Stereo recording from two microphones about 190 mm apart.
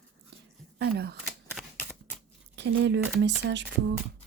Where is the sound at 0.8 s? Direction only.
60° right (ahead or behind).